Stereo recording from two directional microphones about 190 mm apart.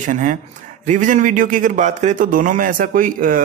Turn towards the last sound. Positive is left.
turn(degrees=-45)  # may be behind; listen again after turning